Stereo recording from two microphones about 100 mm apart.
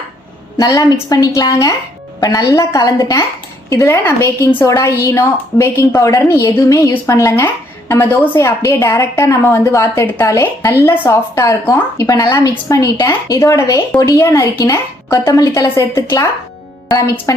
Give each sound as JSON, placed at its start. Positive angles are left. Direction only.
{"t": 0.5, "sound": "a woman's voice", "side_deg": 40}
{"t": 4.6, "sound": "a woman's voice", "side_deg": 30}